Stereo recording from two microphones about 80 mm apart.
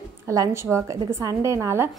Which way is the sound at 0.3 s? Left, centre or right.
Right.